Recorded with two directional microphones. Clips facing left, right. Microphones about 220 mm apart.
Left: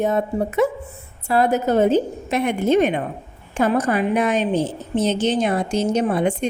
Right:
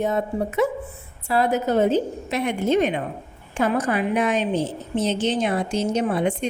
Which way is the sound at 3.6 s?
40° left (ahead or behind).